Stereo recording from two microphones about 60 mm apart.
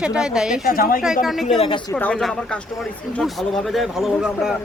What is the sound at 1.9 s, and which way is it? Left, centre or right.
Speech, left.